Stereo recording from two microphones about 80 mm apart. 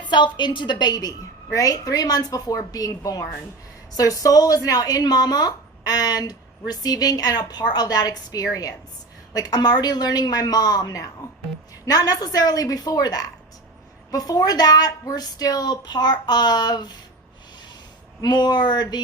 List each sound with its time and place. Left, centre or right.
0.0 s a woman's voice: left
1.5 s a woman's voice: left
18.2 s a woman's voice: left